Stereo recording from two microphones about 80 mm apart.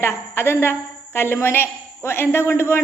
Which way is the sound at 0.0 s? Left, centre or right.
Left.